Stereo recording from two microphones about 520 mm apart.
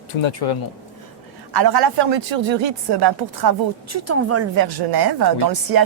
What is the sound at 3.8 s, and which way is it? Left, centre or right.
Speech, right.